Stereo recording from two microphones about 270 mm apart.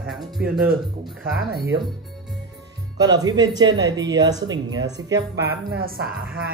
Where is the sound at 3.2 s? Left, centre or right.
Centre.